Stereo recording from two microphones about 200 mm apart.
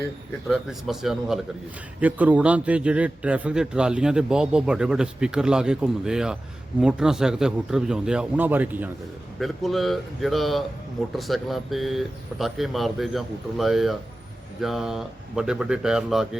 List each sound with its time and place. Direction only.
0.4 s a man's voice: centre (ahead or behind)